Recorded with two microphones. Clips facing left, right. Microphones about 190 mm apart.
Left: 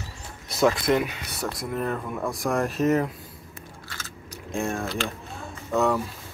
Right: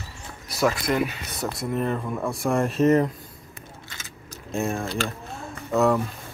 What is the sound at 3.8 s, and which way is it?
Biting, 20° right (ahead or behind).